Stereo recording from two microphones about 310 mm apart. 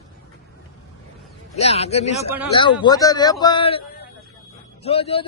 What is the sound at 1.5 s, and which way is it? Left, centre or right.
A man's voice, centre.